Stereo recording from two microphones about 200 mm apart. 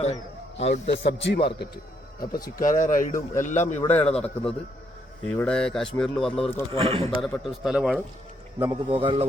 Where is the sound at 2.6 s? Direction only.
40° left (ahead or behind).